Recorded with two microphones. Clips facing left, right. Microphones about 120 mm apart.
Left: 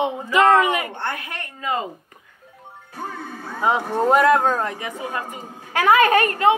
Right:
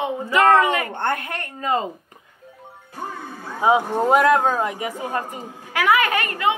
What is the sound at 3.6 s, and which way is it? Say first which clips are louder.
Speech: right 2 dB; 10° right (ahead or behind).